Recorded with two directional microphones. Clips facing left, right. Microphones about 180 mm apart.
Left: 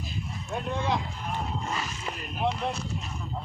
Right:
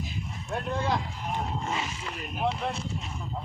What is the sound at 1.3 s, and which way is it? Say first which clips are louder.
Wild animals: right 1 dB; 20° right (ahead or behind).